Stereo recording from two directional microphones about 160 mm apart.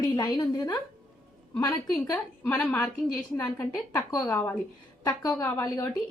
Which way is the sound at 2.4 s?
10° left (ahead or behind).